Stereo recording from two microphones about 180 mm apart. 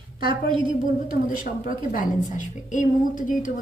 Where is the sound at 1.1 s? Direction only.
50° left (ahead or behind).